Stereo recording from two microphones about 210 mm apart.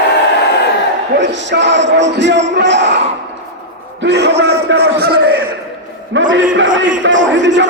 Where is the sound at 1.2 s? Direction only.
60° right (ahead or behind).